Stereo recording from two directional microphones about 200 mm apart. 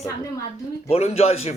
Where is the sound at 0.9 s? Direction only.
30° left (ahead or behind).